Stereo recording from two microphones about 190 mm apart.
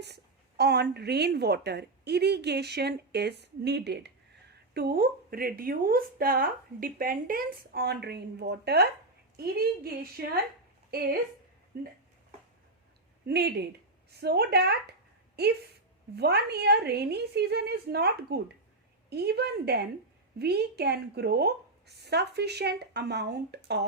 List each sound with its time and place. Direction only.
0.0 s a woman's voice: 60° right (ahead or behind)
11.7 s a woman's voice: 55° right (ahead or behind)
13.2 s a woman's voice: 60° right (ahead or behind)
16.1 s a woman's voice: 60° right (ahead or behind)